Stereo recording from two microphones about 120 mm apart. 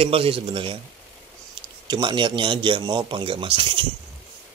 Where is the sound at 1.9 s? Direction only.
40° right (ahead or behind).